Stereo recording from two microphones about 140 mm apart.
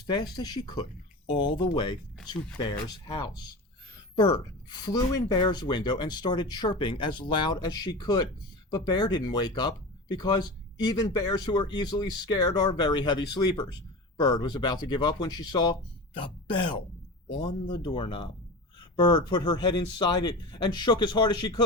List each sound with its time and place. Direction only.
0.0 s speech: 30° left (ahead or behind)